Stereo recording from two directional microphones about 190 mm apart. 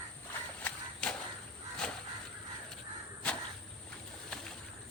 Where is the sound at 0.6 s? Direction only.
5° left (ahead or behind).